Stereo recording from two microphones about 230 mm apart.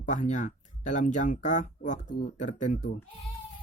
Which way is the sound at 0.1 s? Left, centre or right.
Left.